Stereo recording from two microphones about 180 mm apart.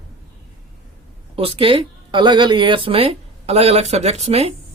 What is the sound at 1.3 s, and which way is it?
Speech, 30° right (ahead or behind).